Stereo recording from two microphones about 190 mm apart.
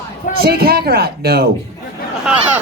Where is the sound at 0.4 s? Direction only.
55° right (ahead or behind).